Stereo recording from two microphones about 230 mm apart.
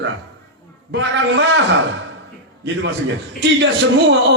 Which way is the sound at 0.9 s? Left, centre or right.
Right.